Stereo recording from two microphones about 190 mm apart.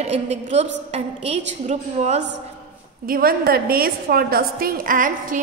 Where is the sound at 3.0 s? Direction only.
50° right (ahead or behind).